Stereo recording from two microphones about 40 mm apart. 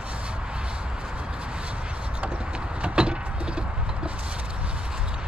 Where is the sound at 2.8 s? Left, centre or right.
Right.